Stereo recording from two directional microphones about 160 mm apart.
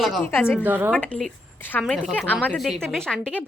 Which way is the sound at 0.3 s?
15° left (ahead or behind).